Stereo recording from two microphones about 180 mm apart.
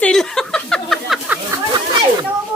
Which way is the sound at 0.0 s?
5° left (ahead or behind).